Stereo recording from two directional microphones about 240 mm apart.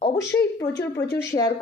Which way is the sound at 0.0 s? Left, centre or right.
Centre.